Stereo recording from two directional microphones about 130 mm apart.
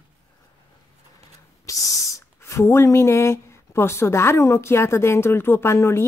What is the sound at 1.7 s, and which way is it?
A woman's voice, 25° left (ahead or behind).